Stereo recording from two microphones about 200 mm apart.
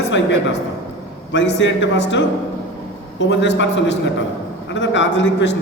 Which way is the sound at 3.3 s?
60° left (ahead or behind).